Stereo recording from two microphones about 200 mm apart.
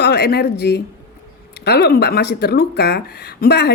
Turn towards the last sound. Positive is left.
turn(degrees=50)  # may be behind; listen again after turning